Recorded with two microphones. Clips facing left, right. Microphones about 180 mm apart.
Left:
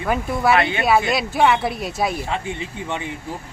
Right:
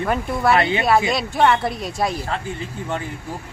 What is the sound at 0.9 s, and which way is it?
Speech, centre (ahead or behind).